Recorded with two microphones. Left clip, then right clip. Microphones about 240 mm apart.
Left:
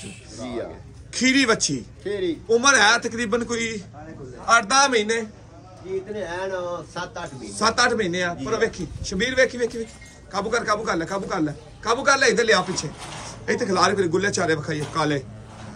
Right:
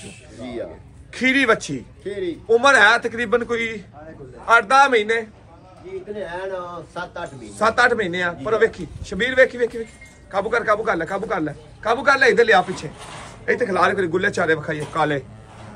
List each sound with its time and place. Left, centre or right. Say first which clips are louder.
0.0 s a man's voice: even; centre
2.0 s a man's voice: left 1 dB; left
2.4 s a man's voice: right 4 dB; centre
6.9 s a man's voice: right 2 dB; left
7.5 s a man's voice: right 3 dB; centre